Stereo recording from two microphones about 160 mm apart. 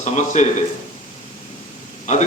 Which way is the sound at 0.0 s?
45° left (ahead or behind).